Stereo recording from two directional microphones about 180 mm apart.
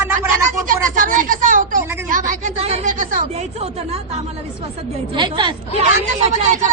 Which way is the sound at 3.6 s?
35° right (ahead or behind).